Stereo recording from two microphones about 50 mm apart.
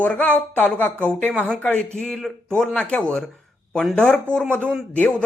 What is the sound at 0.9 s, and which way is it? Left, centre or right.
Speech, left.